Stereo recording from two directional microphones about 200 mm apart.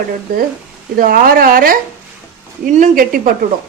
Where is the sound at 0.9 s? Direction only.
45° right (ahead or behind).